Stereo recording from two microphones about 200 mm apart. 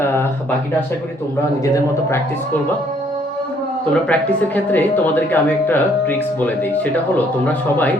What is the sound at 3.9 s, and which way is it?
Speech, 5° left (ahead or behind).